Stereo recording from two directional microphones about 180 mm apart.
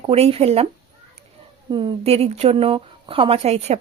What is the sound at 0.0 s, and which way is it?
Speech, 35° right (ahead or behind).